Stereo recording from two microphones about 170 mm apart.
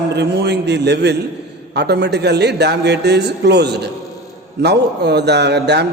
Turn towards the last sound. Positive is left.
turn(degrees=-80)